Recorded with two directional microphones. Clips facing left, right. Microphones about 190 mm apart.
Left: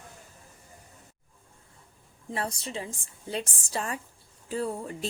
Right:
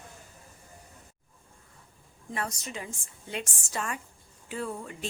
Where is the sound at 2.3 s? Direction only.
30° left (ahead or behind).